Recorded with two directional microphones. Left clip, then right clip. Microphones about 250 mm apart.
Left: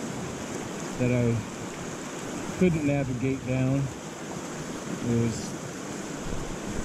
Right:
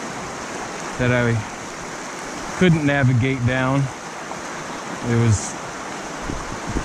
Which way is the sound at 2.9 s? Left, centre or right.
Right.